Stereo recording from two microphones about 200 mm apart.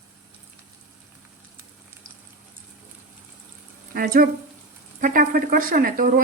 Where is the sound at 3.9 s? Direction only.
45° right (ahead or behind).